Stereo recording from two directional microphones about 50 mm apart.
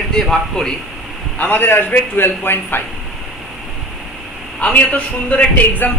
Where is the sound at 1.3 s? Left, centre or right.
Left.